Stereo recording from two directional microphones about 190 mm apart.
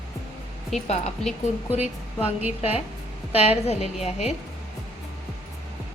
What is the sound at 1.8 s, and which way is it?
Speech, 10° right (ahead or behind).